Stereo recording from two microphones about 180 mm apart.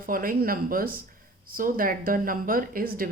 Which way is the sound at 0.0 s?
50° right (ahead or behind).